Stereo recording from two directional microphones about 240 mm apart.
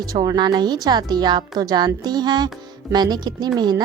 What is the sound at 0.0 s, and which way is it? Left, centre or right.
Speech, centre.